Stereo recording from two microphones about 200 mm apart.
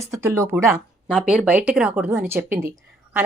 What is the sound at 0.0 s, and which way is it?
A woman's voice, 15° right (ahead or behind).